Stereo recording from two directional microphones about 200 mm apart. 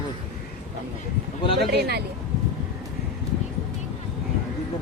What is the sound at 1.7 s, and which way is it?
Speech, 55° right (ahead or behind).